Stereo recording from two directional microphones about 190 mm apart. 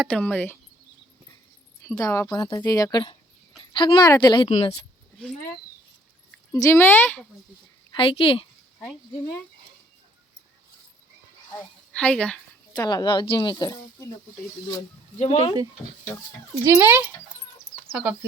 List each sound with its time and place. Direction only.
0.0 s speech: 5° left (ahead or behind)
2.0 s speech: 15° left (ahead or behind)
6.5 s speech: 15° left (ahead or behind)
7.9 s speech: 30° left (ahead or behind)
11.5 s a woman's voice: 5° left (ahead or behind)
12.7 s speech: 20° left (ahead or behind)
15.2 s speech: 30° left (ahead or behind)
16.8 s speech: 10° right (ahead or behind)